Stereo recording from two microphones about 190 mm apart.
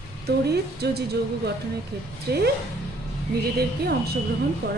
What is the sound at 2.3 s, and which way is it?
Speech, 60° right (ahead or behind).